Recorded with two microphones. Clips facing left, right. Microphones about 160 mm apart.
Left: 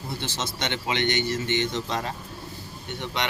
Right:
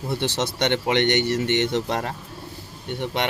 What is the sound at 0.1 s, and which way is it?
Speech, 70° right (ahead or behind).